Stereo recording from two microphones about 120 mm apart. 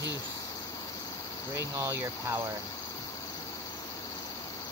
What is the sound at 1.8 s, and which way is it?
Speech, 20° right (ahead or behind).